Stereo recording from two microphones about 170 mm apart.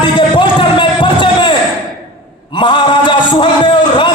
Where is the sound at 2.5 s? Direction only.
30° left (ahead or behind).